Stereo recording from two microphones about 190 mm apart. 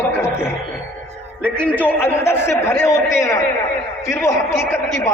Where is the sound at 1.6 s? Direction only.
10° left (ahead or behind).